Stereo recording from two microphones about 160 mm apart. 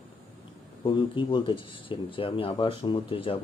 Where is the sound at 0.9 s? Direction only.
30° left (ahead or behind).